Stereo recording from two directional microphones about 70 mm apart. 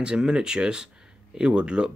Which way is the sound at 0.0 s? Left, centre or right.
Centre.